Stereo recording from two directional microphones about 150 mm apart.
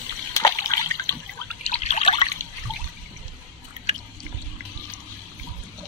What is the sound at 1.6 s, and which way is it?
Trickle, 45° left (ahead or behind).